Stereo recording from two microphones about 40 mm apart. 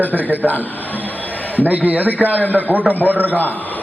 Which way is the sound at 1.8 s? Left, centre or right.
Right.